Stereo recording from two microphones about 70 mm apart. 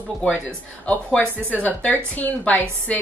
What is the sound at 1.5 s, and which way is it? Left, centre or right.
A woman's voice, left.